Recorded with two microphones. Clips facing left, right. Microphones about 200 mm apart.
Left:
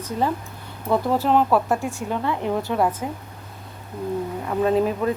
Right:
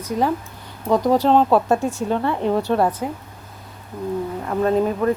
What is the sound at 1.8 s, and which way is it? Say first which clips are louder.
Speech: right 5 dB; 40° right (ahead or behind).